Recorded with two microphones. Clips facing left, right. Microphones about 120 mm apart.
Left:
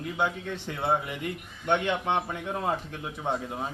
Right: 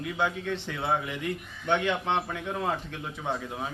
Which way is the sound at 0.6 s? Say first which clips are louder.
Left 4 dB; 50° left (ahead or behind).